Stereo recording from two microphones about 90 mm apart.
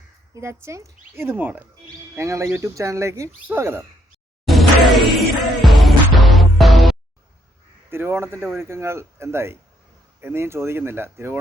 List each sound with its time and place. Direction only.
0.3 s speech: 30° right (ahead or behind)
2.1 s speech: 35° right (ahead or behind)
2.7 s speech: 35° right (ahead or behind)
4.4 s music: centre (ahead or behind)
7.9 s speech: 25° right (ahead or behind)